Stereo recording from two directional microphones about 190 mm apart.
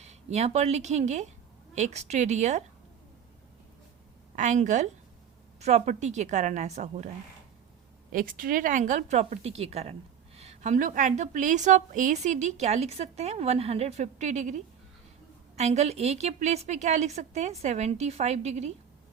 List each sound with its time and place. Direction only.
0.0 s a woman's voice: 35° right (ahead or behind)
4.4 s a woman's voice: 40° right (ahead or behind)
8.1 s a woman's voice: 50° right (ahead or behind)